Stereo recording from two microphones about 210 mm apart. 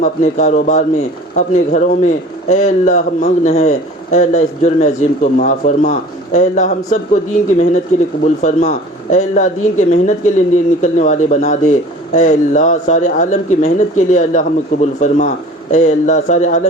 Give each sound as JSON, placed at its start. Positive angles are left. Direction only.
{"t": 0.0, "sound": "a man's voice", "side_deg": 35}